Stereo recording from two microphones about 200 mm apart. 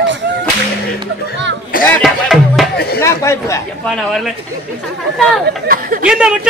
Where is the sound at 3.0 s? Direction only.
15° left (ahead or behind).